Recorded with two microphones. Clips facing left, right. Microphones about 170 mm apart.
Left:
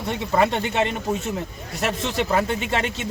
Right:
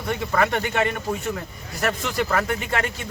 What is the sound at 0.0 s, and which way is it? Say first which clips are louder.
Speech: left 2 dB; 20° left (ahead or behind).